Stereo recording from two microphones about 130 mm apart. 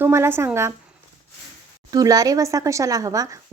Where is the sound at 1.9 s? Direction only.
30° right (ahead or behind).